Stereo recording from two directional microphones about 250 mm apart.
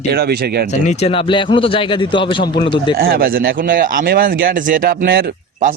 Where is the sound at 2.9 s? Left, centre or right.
Right.